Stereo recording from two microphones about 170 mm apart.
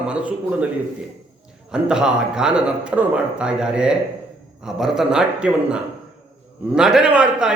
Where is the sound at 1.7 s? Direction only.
5° right (ahead or behind).